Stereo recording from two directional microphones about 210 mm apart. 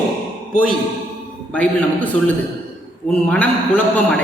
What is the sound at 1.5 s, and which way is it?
Speech, 5° left (ahead or behind).